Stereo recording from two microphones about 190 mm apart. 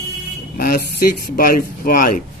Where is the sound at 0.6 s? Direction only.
50° left (ahead or behind).